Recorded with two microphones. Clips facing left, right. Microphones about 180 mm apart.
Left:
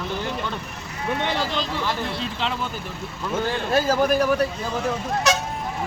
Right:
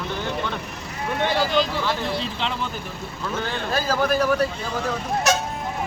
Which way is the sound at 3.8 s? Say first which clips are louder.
Right 1 dB; 15° left (ahead or behind).